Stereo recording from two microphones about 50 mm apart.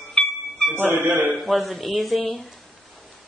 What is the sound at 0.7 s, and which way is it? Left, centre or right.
Speech, right.